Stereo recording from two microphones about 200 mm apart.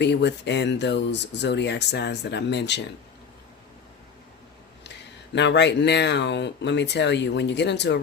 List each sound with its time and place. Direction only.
0.0 s speech: 60° left (ahead or behind)
5.3 s speech: 60° left (ahead or behind)